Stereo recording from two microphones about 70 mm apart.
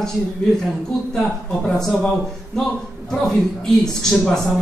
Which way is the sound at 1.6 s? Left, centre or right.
Centre.